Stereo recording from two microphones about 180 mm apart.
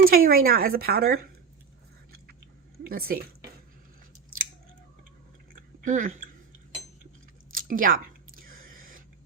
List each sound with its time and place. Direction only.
0.0 s speech: 55° right (ahead or behind)
2.9 s speech: 55° right (ahead or behind)
5.5 s chewing: 45° right (ahead or behind)
7.5 s a sound: 50° right (ahead or behind)